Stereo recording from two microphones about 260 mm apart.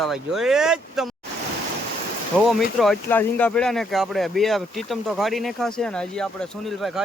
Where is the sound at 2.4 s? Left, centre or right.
Centre.